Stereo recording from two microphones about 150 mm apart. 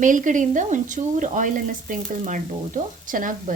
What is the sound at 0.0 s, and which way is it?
Speech, 60° right (ahead or behind).